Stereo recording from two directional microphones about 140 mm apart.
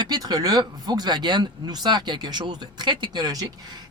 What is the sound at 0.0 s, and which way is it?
Speech, 30° right (ahead or behind).